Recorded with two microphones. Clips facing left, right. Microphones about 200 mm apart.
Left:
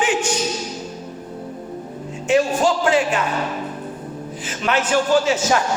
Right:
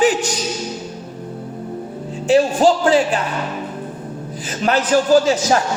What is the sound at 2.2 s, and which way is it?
Music, 35° right (ahead or behind).